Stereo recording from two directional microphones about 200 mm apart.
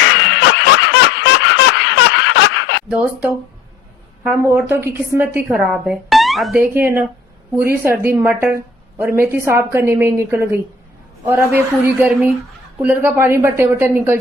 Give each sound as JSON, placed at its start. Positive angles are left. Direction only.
{"t": 0.0, "sound": "snicker", "side_deg": 70}
{"t": 2.9, "sound": "a woman's voice", "side_deg": -10}
{"t": 6.6, "sound": "a woman's voice", "side_deg": -10}